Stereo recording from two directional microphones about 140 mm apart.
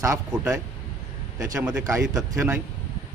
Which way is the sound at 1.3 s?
25° right (ahead or behind).